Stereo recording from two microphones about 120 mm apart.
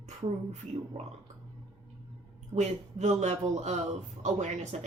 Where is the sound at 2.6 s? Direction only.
75° right (ahead or behind).